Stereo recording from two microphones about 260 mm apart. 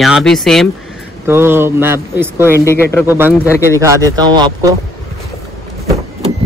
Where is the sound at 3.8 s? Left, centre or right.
Centre.